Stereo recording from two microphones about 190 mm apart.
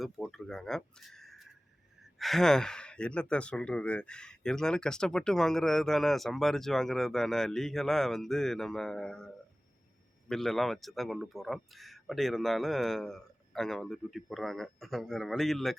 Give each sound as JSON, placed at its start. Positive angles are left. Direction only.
{"t": 0.0, "sound": "speech", "side_deg": 0}